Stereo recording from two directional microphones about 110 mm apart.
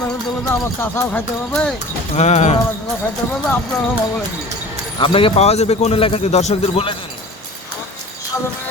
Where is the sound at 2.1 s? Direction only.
90° left.